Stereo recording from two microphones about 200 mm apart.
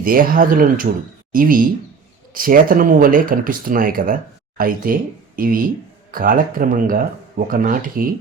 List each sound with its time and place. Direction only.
0.0 s speech: 45° right (ahead or behind)